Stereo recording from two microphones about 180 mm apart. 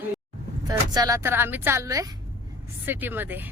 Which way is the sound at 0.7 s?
20° right (ahead or behind).